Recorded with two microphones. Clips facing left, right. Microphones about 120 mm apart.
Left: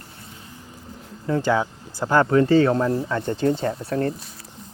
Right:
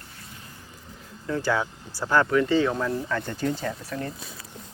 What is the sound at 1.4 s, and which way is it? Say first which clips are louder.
Speech: left 2 dB; 20° left (ahead or behind).